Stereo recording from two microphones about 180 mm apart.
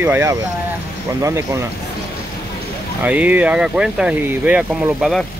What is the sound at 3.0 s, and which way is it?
Speech, 10° right (ahead or behind).